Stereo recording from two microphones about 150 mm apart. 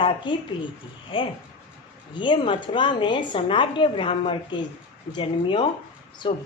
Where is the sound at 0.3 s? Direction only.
30° left (ahead or behind).